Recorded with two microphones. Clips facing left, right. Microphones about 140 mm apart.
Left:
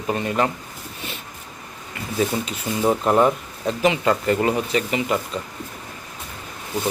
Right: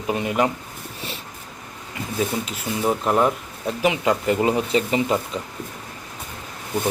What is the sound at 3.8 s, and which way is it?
Speech, 10° right (ahead or behind).